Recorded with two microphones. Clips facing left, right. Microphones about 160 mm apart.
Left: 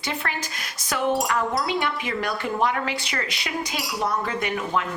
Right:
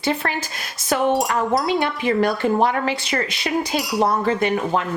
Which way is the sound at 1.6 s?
35° right (ahead or behind).